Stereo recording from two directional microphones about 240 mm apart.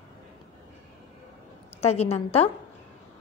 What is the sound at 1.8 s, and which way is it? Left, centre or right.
Speech, left.